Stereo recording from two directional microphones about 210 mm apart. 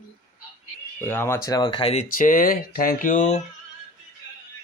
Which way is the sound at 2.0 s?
40° left (ahead or behind).